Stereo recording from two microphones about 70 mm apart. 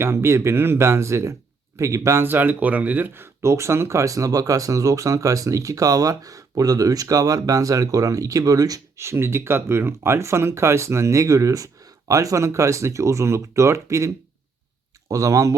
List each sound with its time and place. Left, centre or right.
0.0 s speech: right
3.2 s speech: right
9.0 s speech: right
15.1 s speech: right